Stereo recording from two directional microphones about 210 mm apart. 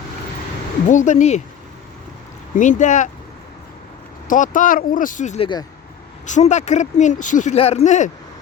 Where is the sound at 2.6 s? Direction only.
35° left (ahead or behind).